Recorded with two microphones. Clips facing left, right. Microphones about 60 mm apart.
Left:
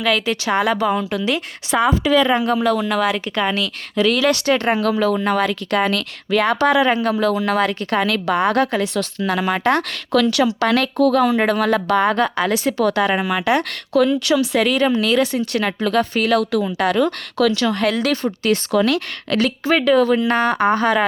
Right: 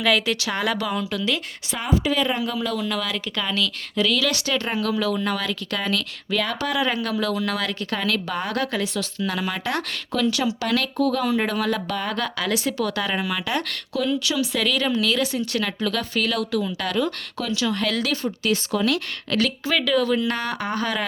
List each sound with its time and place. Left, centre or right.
0.6 s a woman's voice: centre
1.7 s a woman's voice: left
2.5 s speech: left
3.9 s speech: left
6.8 s a woman's voice: left
10.1 s a woman's voice: left
10.7 s speech: left
12.1 s a woman's voice: left
13.9 s a woman's voice: left
16.6 s a woman's voice: left
17.5 s a woman's voice: left